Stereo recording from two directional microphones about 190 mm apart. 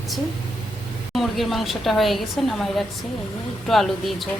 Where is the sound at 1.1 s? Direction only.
Centre (ahead or behind).